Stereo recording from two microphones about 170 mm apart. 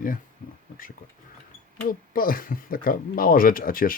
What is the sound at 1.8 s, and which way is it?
Speech, 55° left (ahead or behind).